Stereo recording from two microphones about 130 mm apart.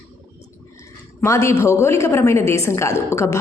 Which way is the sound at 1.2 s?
20° left (ahead or behind).